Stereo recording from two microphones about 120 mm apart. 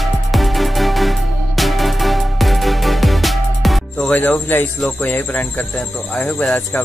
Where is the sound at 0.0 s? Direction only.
Centre (ahead or behind).